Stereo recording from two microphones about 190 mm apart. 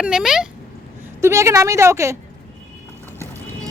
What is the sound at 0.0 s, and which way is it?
Speech, 5° right (ahead or behind).